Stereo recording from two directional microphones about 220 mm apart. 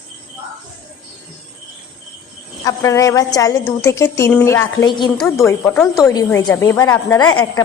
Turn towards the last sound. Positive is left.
turn(degrees=20)  # may be behind; listen again after turning